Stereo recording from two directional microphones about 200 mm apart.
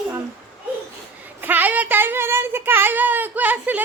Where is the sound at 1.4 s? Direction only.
10° right (ahead or behind).